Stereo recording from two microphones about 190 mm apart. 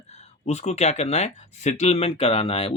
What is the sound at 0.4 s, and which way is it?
Speech, 35° left (ahead or behind).